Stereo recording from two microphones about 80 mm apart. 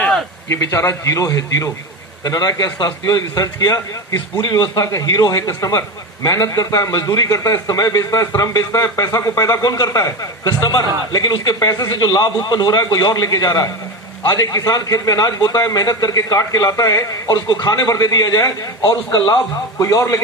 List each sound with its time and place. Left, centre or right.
0.4 s a man's voice: left
2.2 s a man's voice: left
5.3 s a man's voice: left